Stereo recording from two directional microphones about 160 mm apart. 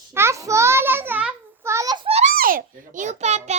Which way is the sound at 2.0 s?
40° right (ahead or behind).